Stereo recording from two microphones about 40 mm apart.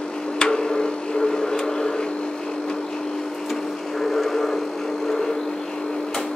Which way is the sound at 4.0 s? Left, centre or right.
Centre.